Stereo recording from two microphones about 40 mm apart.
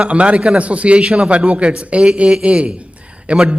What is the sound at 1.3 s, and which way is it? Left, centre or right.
A man's voice, right.